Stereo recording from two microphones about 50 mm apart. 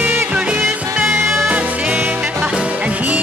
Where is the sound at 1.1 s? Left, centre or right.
Right.